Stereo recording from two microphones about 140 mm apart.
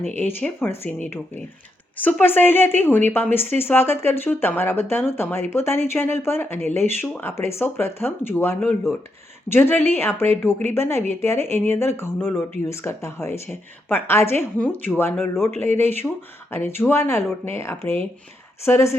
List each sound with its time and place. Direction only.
0.1 s a woman's voice: 15° left (ahead or behind)